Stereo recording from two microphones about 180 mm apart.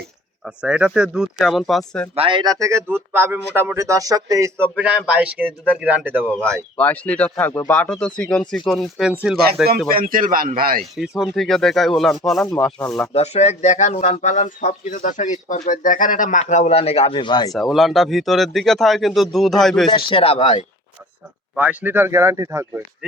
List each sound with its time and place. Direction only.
0.4 s speech: 5° right (ahead or behind)
2.1 s a man's voice: 30° right (ahead or behind); by 6.3 s 10° right (ahead or behind)
6.7 s speech: 10° left (ahead or behind)
9.9 s speech: 50° right (ahead or behind)
11.2 s speech: centre (ahead or behind)
13.1 s speech: 35° left (ahead or behind)
17.5 s speech: centre (ahead or behind)
19.9 s speech: 30° left (ahead or behind)
21.5 s a man's voice: 10° right (ahead or behind)